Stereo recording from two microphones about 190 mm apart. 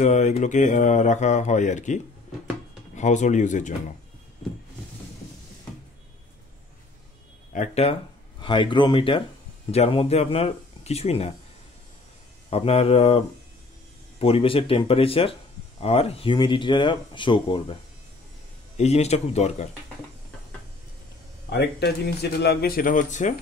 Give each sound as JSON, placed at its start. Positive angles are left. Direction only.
{"t": 0.0, "sound": "speech", "side_deg": 40}
{"t": 3.0, "sound": "speech", "side_deg": 40}
{"t": 7.5, "sound": "speech", "side_deg": 35}
{"t": 12.4, "sound": "speech", "side_deg": 30}
{"t": 14.2, "sound": "speech", "side_deg": 30}
{"t": 18.8, "sound": "speech", "side_deg": 35}
{"t": 21.5, "sound": "speech", "side_deg": 60}